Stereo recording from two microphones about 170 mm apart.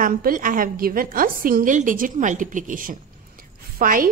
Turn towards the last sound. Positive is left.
turn(degrees=-55)  # may be behind; listen again after turning